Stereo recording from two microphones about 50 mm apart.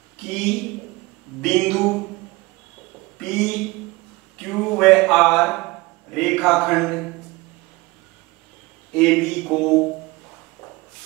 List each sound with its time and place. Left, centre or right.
0.2 s a man's voice: centre
3.2 s a sound: centre
8.9 s a man's voice: centre